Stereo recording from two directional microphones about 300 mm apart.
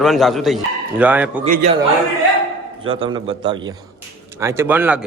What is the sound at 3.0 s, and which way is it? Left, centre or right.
A man's voice, centre.